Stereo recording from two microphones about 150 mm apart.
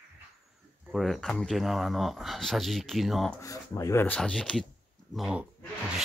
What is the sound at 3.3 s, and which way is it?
Speech, 20° left (ahead or behind).